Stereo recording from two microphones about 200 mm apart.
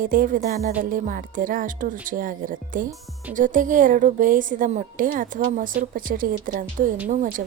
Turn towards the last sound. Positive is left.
turn(degrees=-40)  # may be behind; listen again after turning